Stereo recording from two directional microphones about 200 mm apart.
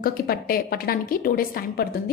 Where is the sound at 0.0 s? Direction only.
45° left (ahead or behind).